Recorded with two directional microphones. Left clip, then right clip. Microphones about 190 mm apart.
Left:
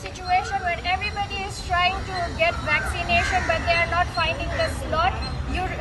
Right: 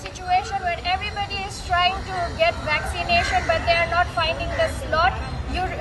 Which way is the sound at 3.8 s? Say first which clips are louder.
Right 2 dB; centre (ahead or behind).